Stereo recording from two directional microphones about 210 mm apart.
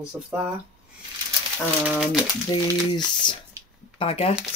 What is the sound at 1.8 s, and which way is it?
Speech, 5° right (ahead or behind).